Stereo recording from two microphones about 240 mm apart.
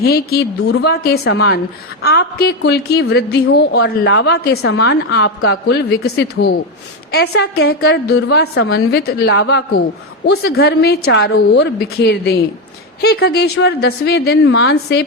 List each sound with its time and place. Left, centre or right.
0.0 s a woman's voice: left